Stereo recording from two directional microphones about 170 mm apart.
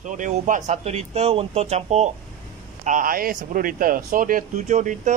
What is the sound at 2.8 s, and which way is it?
Speech, 50° right (ahead or behind).